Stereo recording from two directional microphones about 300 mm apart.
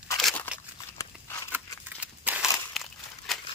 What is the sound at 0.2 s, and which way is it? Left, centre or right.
Crunch, centre.